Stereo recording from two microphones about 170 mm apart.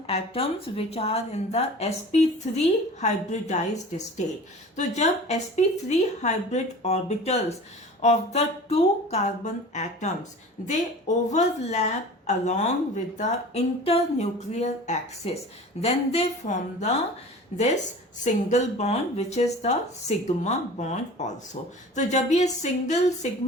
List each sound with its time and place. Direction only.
0.1 s speech: 35° left (ahead or behind)